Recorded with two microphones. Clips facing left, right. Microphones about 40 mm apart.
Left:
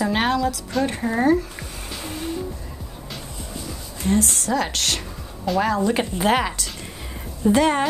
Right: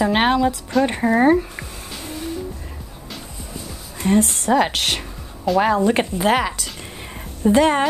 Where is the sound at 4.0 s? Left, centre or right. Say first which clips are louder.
Right 4 dB; right.